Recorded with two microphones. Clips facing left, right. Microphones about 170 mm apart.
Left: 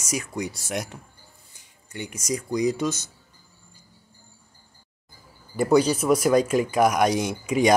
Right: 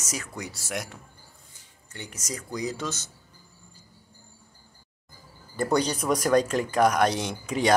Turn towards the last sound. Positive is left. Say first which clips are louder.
# left 5 dB
turn(degrees=10)  # may be behind; listen again after turning